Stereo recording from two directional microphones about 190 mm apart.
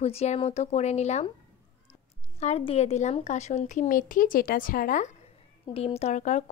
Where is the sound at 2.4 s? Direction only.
30° left (ahead or behind).